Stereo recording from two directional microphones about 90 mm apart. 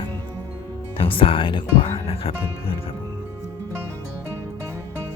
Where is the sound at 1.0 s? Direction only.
90° left.